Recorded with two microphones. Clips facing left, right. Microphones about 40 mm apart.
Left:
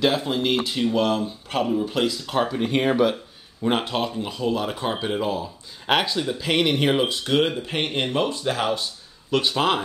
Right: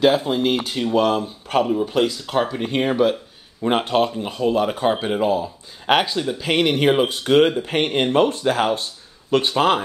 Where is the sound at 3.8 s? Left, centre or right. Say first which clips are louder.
Right 6 dB; right.